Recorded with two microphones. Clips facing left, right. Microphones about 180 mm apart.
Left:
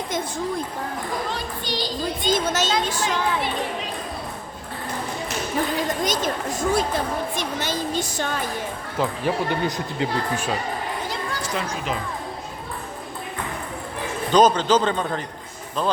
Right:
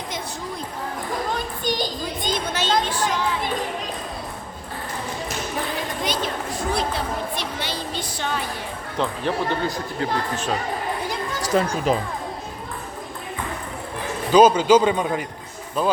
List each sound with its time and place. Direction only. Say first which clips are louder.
1.3 s a child's voice: right 3 dB; 50° right (ahead or behind)
2.3 s a woman's voice: left 2 dB; 45° left (ahead or behind)
3.0 s a child's voice: even; 45° right (ahead or behind)
6.0 s a woman's voice: left 2 dB; 45° left (ahead or behind)
9.0 s speech: even; 10° left (ahead or behind)
11.4 s speech: right 10 dB; 40° right (ahead or behind)
14.3 s a man's voice: right 3 dB; 10° right (ahead or behind)